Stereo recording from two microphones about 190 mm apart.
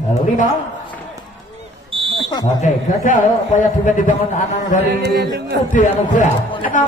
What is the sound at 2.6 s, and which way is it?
Speech, 40° left (ahead or behind).